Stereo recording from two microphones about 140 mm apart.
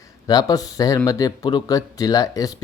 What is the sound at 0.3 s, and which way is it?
Speech, 25° left (ahead or behind).